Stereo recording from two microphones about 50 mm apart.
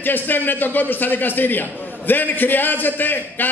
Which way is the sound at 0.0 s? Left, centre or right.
Left.